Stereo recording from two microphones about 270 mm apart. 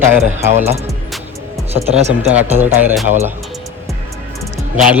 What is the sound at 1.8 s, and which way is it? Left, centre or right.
Speech, right.